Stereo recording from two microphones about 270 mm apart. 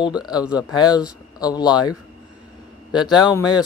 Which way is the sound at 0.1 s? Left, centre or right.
Centre.